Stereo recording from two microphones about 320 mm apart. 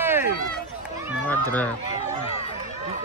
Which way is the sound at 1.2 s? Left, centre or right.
Centre.